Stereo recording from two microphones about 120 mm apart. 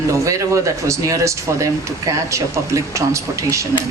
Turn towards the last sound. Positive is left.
turn(degrees=-25)  # may be behind; listen again after turning